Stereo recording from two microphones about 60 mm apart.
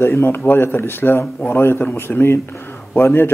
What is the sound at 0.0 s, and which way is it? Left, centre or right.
A man's voice, left.